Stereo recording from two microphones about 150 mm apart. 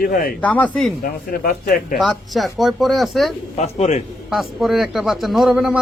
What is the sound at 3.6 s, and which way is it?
Speech, 45° left (ahead or behind).